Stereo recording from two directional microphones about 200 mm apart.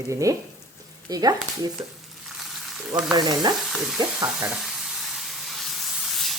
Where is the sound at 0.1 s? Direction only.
15° right (ahead or behind).